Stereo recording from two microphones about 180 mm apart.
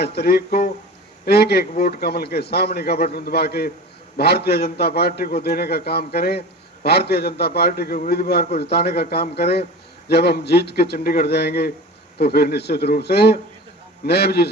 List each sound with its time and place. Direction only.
0.0 s a man's voice: 60° left (ahead or behind)